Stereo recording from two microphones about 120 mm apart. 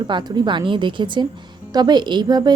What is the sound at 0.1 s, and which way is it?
A woman's voice, 40° right (ahead or behind).